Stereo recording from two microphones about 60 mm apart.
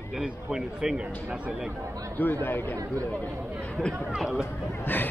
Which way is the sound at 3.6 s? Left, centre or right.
Centre.